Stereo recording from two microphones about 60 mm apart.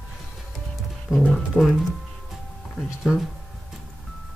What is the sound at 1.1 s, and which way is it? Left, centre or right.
Speech, centre.